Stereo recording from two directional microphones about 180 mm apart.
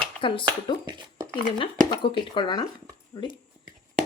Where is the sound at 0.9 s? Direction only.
20° right (ahead or behind).